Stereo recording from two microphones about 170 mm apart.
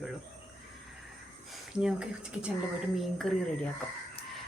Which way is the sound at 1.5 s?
5° right (ahead or behind).